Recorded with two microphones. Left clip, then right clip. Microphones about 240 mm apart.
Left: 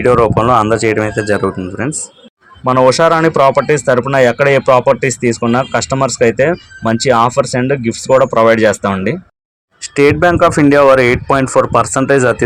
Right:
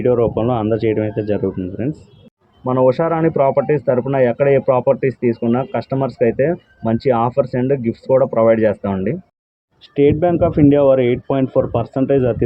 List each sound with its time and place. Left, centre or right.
0.0 s speech: centre
2.6 s speech: left
11.4 s speech: left
11.8 s speech: centre